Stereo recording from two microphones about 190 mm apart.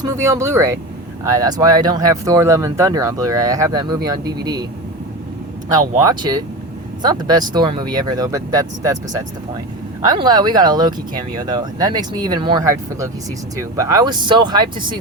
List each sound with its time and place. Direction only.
0.0 s speech: 15° right (ahead or behind)
6.1 s speech: 20° right (ahead or behind)